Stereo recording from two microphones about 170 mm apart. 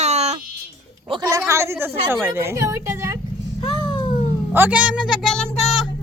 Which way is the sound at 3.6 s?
25° left (ahead or behind).